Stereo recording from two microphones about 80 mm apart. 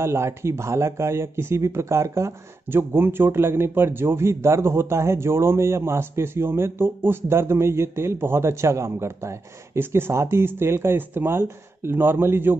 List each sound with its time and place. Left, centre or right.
0.0 s speech: right